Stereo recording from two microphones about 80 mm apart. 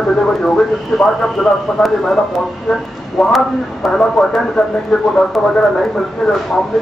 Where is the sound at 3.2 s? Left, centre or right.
Centre.